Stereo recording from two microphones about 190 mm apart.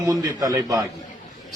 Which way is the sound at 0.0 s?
20° right (ahead or behind).